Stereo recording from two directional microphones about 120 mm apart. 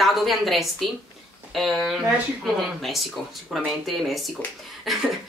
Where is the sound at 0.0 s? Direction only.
Centre (ahead or behind).